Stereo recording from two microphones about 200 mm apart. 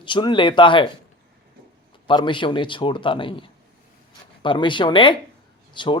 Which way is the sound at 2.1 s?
25° left (ahead or behind).